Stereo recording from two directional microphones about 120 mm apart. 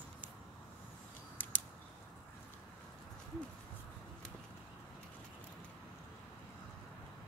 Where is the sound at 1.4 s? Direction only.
15° left (ahead or behind).